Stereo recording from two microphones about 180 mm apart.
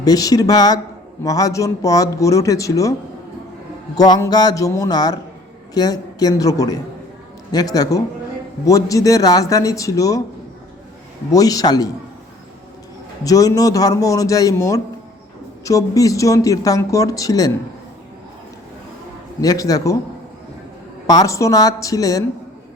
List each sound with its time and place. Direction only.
0.0 s speech: 20° left (ahead or behind)
3.9 s speech: 20° left (ahead or behind)
11.3 s speech: 20° left (ahead or behind)
13.2 s speech: 20° left (ahead or behind)
19.4 s speech: 20° left (ahead or behind)
21.1 s speech: 20° left (ahead or behind)